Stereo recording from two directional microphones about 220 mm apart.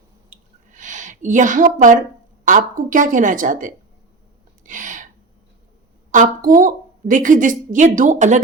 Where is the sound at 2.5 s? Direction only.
35° right (ahead or behind).